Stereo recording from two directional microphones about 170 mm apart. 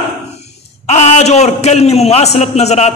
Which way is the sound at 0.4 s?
40° left (ahead or behind).